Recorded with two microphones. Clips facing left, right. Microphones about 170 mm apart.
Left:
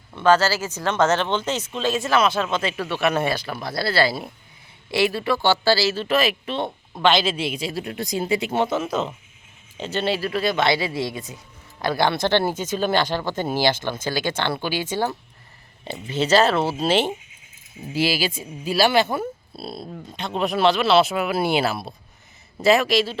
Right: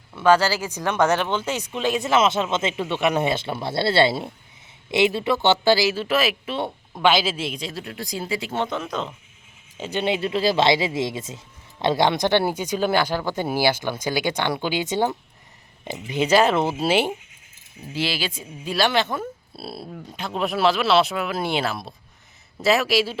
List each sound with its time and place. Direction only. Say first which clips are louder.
0.2 s speech: even; 10° right (ahead or behind); by 9.1 s 5° left (ahead or behind)
9.7 s speech: even; 10° right (ahead or behind)
17.9 s speech: left 4 dB; 10° left (ahead or behind)
19.5 s speech: left 1 dB; 5° right (ahead or behind)